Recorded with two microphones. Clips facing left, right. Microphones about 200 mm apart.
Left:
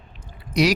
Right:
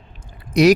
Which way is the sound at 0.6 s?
50° right (ahead or behind).